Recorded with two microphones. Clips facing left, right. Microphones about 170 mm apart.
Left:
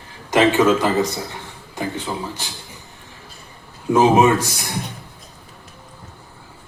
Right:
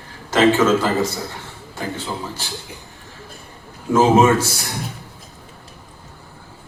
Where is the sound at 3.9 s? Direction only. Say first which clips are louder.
Even; 15° left (ahead or behind).